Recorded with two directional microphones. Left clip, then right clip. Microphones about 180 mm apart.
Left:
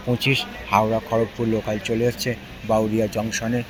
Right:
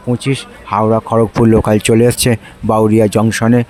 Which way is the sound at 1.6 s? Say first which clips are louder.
Right 12 dB; 55° right (ahead or behind).